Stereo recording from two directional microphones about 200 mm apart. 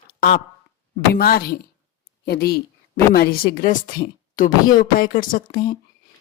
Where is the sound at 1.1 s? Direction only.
50° left (ahead or behind).